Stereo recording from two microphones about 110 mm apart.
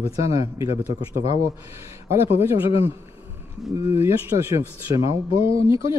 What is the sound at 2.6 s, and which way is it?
Speech, 55° left (ahead or behind).